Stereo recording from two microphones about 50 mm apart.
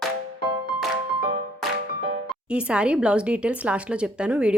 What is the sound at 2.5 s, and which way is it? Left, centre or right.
Speech, right.